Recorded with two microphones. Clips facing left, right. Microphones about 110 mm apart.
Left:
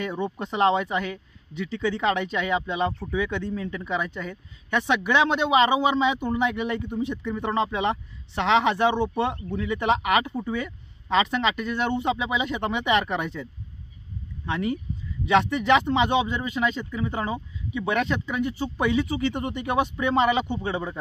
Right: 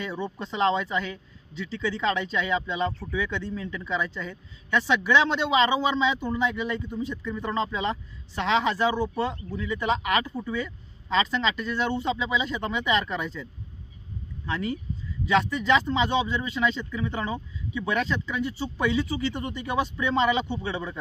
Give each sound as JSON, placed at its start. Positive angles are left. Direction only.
{"t": 0.4, "sound": "speech", "side_deg": 55}
{"t": 2.9, "sound": "speech", "side_deg": 15}
{"t": 3.2, "sound": "speech", "side_deg": 55}
{"t": 8.9, "sound": "speech", "side_deg": 25}
{"t": 9.5, "sound": "speech", "side_deg": 65}
{"t": 15.2, "sound": "speech", "side_deg": 65}
{"t": 17.7, "sound": "speech", "side_deg": 55}